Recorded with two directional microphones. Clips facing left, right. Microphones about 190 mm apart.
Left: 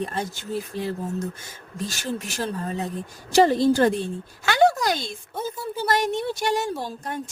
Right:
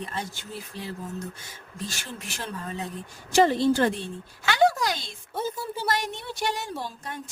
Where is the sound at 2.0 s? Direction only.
40° left (ahead or behind).